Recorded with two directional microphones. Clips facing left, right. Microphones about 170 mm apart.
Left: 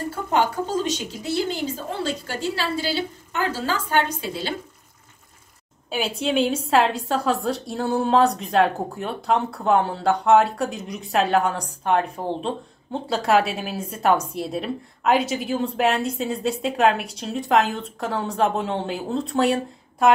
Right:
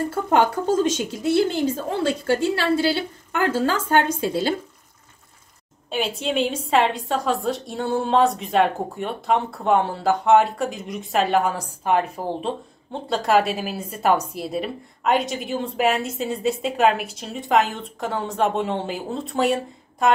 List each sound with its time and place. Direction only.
0.1 s a woman's voice: 50° right (ahead or behind)
5.9 s a woman's voice: centre (ahead or behind)